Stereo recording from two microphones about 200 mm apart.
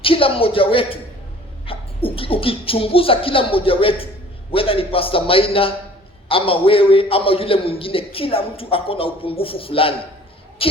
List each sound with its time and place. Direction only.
0.0 s a man's voice: 25° left (ahead or behind)